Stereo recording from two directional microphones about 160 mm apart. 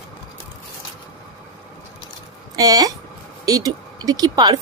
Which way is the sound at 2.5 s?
25° right (ahead or behind).